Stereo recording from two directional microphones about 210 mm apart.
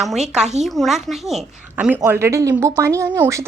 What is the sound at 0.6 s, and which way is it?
A woman's voice, centre (ahead or behind).